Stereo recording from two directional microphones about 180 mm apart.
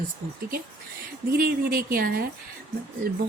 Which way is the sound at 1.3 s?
55° right (ahead or behind).